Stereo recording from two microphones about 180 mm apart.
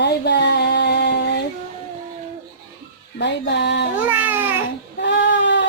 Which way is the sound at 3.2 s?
75° left (ahead or behind).